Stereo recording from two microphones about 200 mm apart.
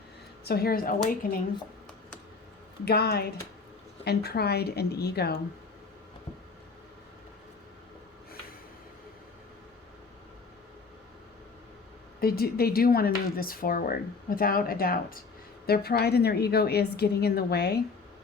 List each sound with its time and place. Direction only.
0.4 s a woman's voice: 50° left (ahead or behind)
2.8 s a woman's voice: 50° left (ahead or behind)
12.2 s a woman's voice: 50° left (ahead or behind)